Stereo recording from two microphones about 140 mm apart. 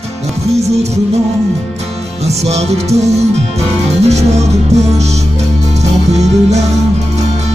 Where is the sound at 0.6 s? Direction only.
50° right (ahead or behind).